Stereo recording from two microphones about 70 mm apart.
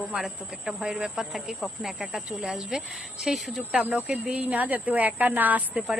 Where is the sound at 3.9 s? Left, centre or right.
Centre.